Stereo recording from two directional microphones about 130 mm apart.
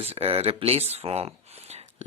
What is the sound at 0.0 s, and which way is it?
Speech, 50° right (ahead or behind).